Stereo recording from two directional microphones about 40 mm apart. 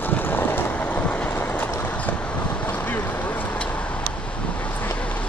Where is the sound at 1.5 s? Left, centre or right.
Left.